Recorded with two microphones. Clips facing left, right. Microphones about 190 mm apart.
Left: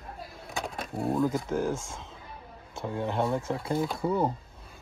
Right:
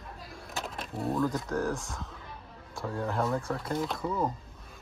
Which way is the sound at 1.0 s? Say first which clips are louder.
Left 2 dB; 20° left (ahead or behind).